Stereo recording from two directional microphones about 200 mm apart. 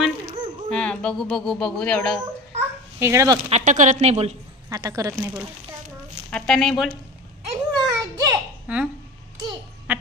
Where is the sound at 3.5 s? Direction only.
35° right (ahead or behind).